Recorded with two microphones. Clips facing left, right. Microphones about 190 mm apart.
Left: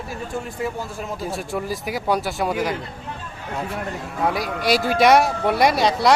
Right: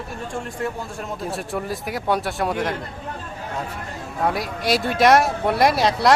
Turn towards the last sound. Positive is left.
turn(degrees=0)  # may be behind; listen again after turning